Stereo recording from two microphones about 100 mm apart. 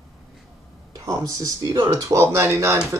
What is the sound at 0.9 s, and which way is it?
A man's voice, 35° right (ahead or behind).